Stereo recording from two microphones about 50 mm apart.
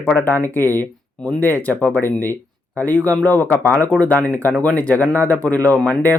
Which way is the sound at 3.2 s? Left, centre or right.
Left.